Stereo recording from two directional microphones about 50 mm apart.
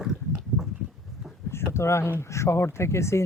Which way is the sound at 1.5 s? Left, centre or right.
Left.